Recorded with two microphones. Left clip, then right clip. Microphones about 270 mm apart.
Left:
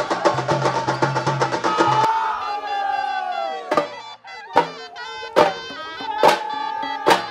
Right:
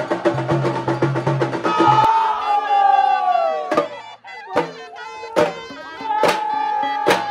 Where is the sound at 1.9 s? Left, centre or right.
Right.